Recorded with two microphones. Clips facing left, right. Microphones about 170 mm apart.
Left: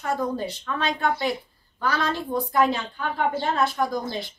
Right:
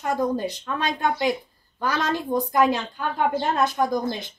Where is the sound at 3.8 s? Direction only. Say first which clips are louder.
Right 3 dB; 20° right (ahead or behind).